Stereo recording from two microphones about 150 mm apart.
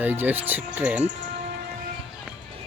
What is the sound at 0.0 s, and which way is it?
A man's voice, 10° right (ahead or behind).